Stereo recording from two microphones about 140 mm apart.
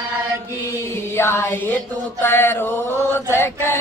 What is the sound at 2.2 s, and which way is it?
Mantra, 15° left (ahead or behind).